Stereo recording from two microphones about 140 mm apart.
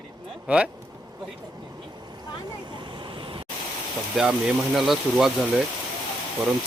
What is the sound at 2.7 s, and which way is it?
Vehicle, 35° right (ahead or behind).